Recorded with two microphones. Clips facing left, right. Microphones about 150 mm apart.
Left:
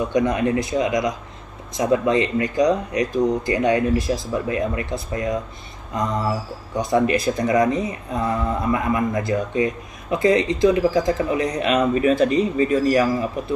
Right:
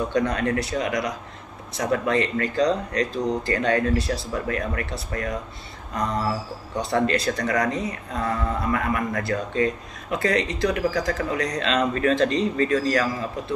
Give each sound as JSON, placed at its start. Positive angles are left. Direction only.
{"t": 0.1, "sound": "speech", "side_deg": 20}